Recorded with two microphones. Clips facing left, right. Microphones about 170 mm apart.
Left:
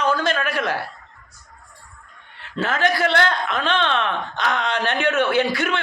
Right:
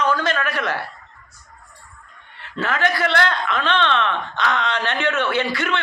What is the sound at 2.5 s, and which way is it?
Speech, 25° left (ahead or behind).